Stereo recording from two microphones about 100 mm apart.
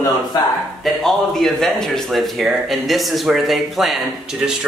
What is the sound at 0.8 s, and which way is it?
Speech, centre (ahead or behind).